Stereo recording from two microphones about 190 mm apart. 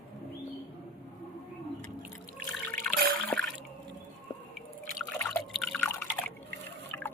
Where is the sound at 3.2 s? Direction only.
5° left (ahead or behind).